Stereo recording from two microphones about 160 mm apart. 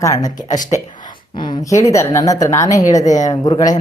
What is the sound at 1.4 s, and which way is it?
Speech, 30° left (ahead or behind).